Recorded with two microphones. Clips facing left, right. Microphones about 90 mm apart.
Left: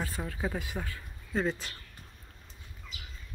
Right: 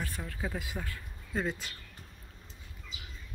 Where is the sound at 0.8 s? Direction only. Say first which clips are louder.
Left 1 dB; centre (ahead or behind).